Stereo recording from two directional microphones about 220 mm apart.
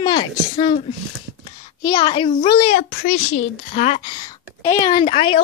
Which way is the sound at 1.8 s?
20° left (ahead or behind).